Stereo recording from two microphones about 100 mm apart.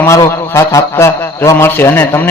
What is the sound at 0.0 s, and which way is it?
A man's voice, 30° left (ahead or behind).